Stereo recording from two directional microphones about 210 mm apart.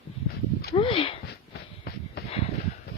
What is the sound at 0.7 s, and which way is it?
Sniff, 25° left (ahead or behind).